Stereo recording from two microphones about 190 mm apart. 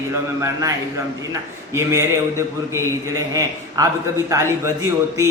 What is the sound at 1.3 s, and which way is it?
Speech, 15° right (ahead or behind).